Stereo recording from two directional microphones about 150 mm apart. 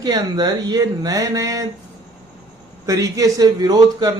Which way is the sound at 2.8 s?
20° right (ahead or behind).